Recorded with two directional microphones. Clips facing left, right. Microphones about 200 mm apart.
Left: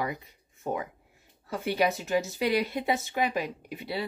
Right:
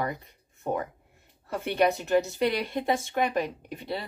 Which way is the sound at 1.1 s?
Centre (ahead or behind).